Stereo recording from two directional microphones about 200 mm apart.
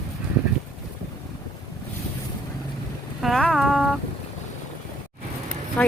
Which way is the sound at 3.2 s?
Centre (ahead or behind).